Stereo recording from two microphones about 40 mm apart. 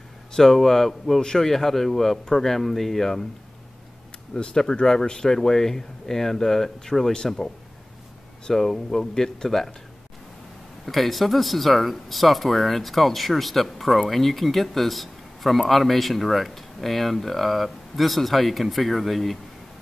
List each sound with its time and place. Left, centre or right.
0.3 s speech: centre
4.3 s speech: centre
10.9 s speech: centre